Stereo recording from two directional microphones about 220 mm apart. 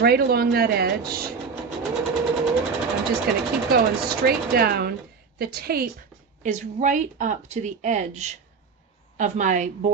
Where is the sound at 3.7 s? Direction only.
45° right (ahead or behind).